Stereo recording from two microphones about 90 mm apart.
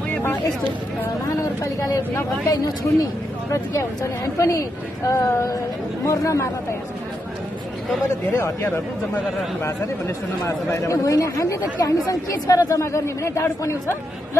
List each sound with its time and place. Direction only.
0.1 s vehicle: 20° left (ahead or behind)
1.6 s a woman's voice: 35° left (ahead or behind)
8.1 s a woman's voice: 30° left (ahead or behind)